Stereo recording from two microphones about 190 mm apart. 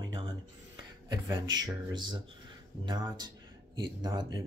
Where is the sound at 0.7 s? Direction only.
20° right (ahead or behind).